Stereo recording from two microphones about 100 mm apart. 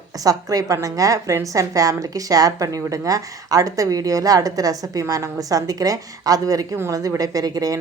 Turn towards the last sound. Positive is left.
turn(degrees=-35)  # may be behind; listen again after turning